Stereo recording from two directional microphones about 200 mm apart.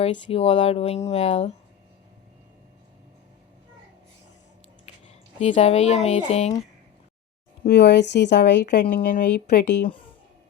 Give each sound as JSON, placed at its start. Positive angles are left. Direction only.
{"t": 0.0, "sound": "speech", "side_deg": 30}
{"t": 4.9, "sound": "a sound", "side_deg": 35}
{"t": 5.4, "sound": "speech", "side_deg": 35}
{"t": 7.6, "sound": "speech", "side_deg": 55}